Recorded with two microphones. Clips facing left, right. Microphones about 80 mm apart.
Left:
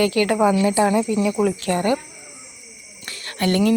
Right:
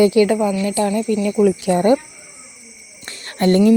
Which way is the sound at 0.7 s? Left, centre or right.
Left.